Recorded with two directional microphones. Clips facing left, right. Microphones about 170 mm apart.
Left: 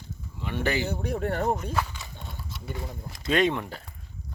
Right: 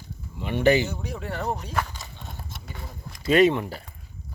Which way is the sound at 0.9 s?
55° left (ahead or behind).